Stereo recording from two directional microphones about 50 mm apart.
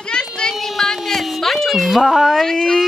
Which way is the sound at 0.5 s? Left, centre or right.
Centre.